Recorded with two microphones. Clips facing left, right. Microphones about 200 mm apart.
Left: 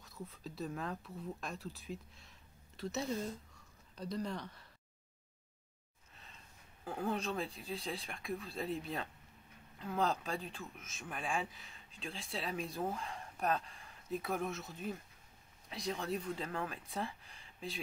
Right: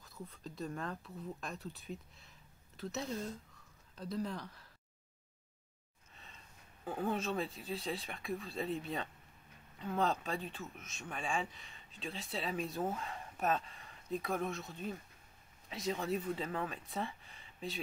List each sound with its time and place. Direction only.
0.0 s speech: centre (ahead or behind)
6.8 s speech: centre (ahead or behind)